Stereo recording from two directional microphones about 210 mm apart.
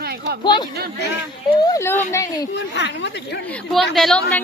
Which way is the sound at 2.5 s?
55° left (ahead or behind).